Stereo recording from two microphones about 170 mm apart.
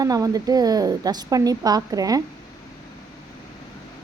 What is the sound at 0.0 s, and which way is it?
A woman's voice, 20° right (ahead or behind).